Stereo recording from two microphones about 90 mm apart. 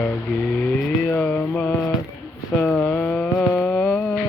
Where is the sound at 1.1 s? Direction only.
20° left (ahead or behind).